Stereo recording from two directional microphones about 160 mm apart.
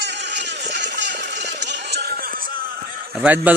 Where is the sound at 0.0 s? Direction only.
90° right; by 2.5 s 65° right (ahead or behind).